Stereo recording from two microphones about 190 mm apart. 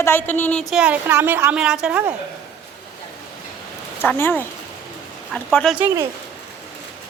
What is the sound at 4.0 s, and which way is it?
A woman's voice, 10° left (ahead or behind).